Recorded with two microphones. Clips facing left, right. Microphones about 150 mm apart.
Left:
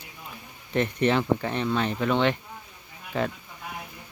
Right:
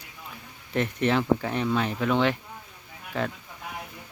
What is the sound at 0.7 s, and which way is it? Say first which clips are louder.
Speech: left 1 dB; centre (ahead or behind).